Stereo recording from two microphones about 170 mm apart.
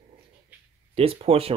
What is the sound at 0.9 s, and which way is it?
Speech, 35° right (ahead or behind).